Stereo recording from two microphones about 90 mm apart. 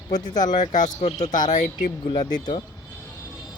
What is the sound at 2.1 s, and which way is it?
Speech, 50° left (ahead or behind).